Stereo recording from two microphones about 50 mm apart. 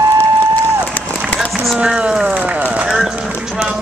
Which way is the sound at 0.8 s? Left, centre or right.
Left.